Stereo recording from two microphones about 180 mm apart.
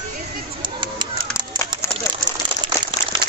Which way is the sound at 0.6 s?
25° right (ahead or behind).